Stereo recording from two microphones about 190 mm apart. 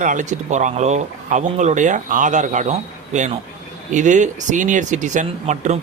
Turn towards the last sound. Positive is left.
turn(degrees=-40)  # may be behind; listen again after turning